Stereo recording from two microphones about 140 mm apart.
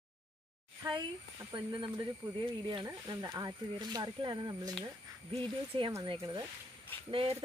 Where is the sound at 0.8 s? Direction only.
30° right (ahead or behind).